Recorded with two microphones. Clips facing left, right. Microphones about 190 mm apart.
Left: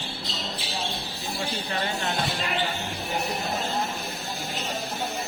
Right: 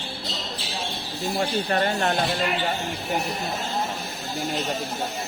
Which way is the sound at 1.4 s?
50° right (ahead or behind).